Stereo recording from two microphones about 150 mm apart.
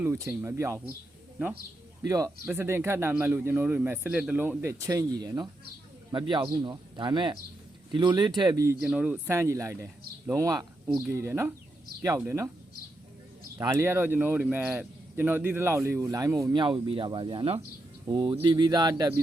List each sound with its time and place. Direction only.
0.0 s speech: 15° right (ahead or behind)
2.0 s speech: 20° right (ahead or behind)
8.4 s speech: 30° right (ahead or behind)
8.8 s speech: 10° right (ahead or behind)
13.6 s speech: 20° right (ahead or behind)